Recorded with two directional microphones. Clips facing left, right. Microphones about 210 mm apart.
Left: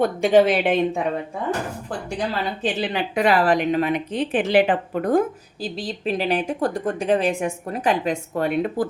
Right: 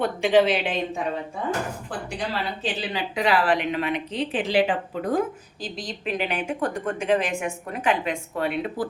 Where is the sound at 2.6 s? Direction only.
55° left (ahead or behind).